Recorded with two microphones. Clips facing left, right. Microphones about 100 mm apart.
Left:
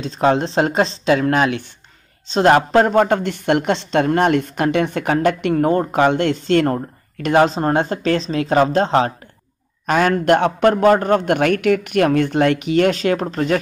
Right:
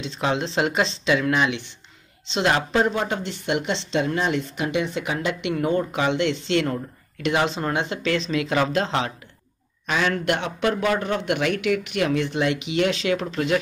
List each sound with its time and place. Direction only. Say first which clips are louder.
0.0 s speech: left 8 dB; 40° left (ahead or behind)